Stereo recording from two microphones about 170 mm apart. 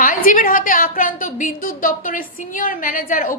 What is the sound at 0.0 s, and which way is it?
A woman's voice, 55° left (ahead or behind).